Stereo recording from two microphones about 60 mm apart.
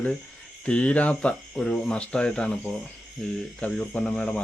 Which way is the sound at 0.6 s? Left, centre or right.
Centre.